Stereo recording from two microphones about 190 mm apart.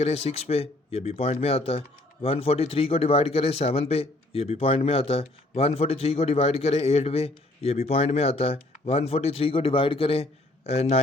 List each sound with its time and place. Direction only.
0.0 s speech: 30° left (ahead or behind)